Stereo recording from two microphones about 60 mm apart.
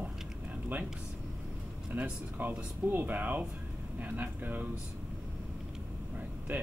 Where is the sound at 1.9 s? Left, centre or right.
Right.